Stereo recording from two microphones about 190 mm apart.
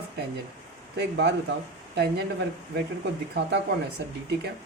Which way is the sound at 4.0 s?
60° right (ahead or behind).